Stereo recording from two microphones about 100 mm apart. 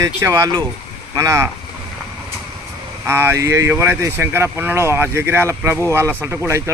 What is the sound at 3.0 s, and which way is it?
Speech, 25° right (ahead or behind).